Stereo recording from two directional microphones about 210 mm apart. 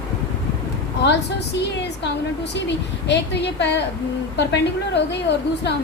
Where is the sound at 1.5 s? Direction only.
55° left (ahead or behind).